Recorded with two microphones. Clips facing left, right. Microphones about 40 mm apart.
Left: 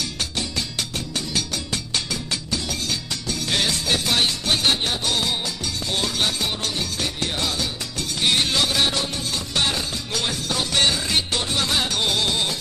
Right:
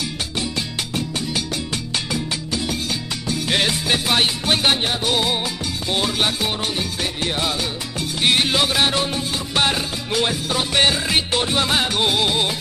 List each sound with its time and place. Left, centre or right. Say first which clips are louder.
3.3 s music: right 3 dB; right
8.2 s music: right 3 dB; right